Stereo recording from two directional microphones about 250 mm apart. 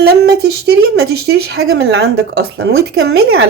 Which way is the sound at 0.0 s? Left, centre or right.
Right.